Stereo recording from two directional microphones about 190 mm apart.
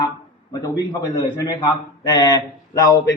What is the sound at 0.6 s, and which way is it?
A man's voice, 20° left (ahead or behind).